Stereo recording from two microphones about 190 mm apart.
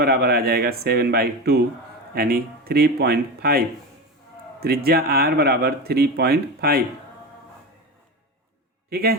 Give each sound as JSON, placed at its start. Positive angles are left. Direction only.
{"t": 0.0, "sound": "speech", "side_deg": -55}
{"t": 4.6, "sound": "speech", "side_deg": -55}
{"t": 8.9, "sound": "a man's voice", "side_deg": -55}